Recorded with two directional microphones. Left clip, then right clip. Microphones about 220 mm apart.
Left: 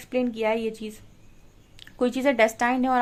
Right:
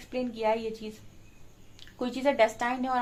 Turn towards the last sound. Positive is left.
turn(degrees=45)  # may be behind; listen again after turning